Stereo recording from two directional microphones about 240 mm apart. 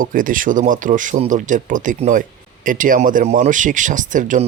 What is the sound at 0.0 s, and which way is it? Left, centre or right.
Speech, right.